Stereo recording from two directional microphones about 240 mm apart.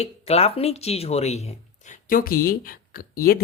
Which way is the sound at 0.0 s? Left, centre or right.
Left.